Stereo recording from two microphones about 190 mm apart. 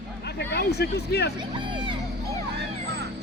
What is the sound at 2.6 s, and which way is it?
Vehicle, 60° right (ahead or behind).